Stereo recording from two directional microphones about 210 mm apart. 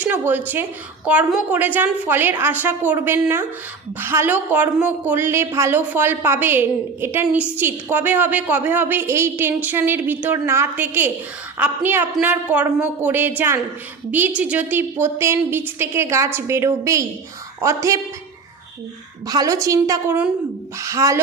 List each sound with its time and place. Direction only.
0.0 s a woman's voice: 10° right (ahead or behind)
19.3 s a woman's voice: 15° right (ahead or behind)